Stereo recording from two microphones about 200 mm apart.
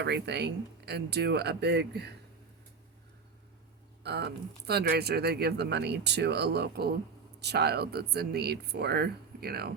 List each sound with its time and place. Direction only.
0.0 s speech: 55° right (ahead or behind)
4.0 s speech: 55° right (ahead or behind)